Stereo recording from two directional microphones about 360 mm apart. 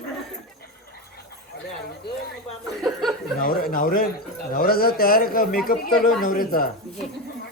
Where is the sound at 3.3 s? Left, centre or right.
Left.